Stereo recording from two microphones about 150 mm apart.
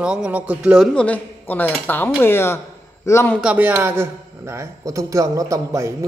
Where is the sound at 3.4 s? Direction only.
10° right (ahead or behind).